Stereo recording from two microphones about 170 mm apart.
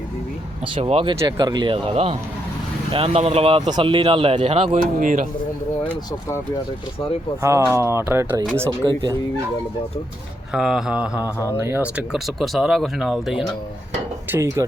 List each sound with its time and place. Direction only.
0.8 s speech: 35° right (ahead or behind)
1.2 s speech: 25° right (ahead or behind)
4.9 s speech: 50° right (ahead or behind)
7.4 s speech: 15° right (ahead or behind)
8.8 s a sound: 25° right (ahead or behind)
10.5 s speech: 5° right (ahead or behind)
14.3 s a sound: 15° right (ahead or behind)